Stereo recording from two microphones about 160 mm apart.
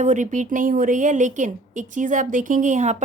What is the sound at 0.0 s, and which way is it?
Speech, 50° right (ahead or behind).